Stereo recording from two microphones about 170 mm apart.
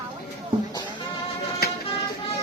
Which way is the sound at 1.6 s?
65° left (ahead or behind).